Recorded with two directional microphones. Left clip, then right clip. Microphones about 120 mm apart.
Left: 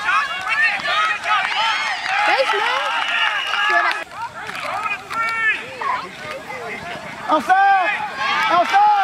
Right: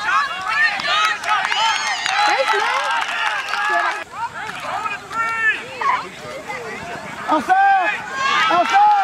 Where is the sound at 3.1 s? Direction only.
Centre (ahead or behind).